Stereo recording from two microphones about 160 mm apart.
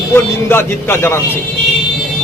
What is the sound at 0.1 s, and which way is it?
Speech, 15° left (ahead or behind).